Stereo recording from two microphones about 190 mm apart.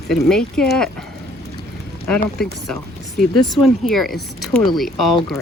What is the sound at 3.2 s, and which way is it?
Speech, centre (ahead or behind).